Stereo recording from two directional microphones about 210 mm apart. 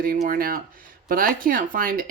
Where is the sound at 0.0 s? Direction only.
40° right (ahead or behind).